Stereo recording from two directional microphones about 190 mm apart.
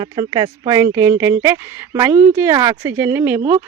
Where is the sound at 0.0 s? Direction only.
20° right (ahead or behind).